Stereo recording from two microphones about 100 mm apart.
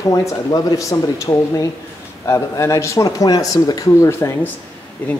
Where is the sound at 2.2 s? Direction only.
30° left (ahead or behind).